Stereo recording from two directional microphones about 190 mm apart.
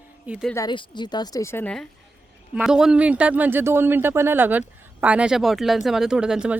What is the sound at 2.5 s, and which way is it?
Speech, 5° right (ahead or behind).